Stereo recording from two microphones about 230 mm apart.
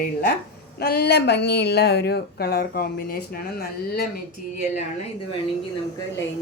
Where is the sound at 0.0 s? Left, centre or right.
Left.